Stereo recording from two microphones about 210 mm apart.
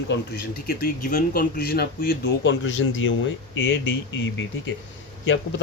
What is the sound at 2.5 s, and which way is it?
Speech, 65° left (ahead or behind).